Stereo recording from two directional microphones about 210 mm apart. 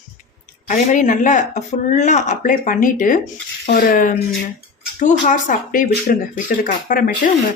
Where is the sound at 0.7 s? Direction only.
35° left (ahead or behind).